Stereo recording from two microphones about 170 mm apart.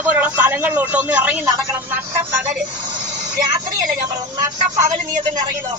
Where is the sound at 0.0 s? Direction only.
10° right (ahead or behind).